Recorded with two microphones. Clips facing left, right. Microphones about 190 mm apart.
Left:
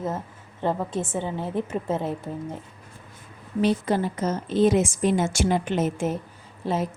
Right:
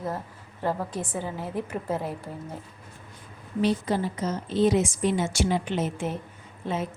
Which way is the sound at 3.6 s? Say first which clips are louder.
Left 2 dB; 55° left (ahead or behind).